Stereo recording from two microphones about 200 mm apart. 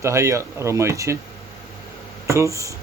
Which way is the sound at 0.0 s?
15° right (ahead or behind).